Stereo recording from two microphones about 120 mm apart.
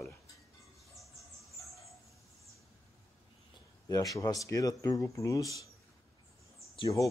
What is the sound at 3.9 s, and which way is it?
Speech, 30° left (ahead or behind).